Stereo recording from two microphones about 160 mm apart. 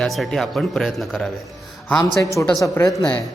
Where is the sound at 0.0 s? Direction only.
Centre (ahead or behind).